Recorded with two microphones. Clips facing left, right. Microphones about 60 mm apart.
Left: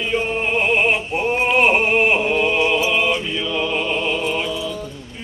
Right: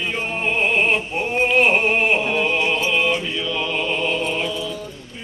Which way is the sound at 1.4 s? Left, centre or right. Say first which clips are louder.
Even; centre.